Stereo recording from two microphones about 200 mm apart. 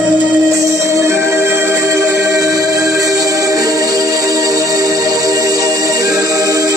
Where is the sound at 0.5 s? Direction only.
15° right (ahead or behind).